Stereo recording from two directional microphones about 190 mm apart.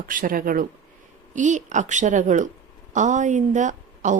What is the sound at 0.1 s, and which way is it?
A woman's voice, 45° right (ahead or behind).